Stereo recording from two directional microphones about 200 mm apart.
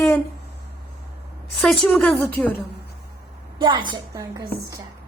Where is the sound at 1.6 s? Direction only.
5° left (ahead or behind).